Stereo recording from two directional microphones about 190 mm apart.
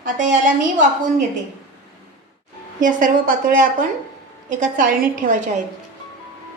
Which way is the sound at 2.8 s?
45° right (ahead or behind).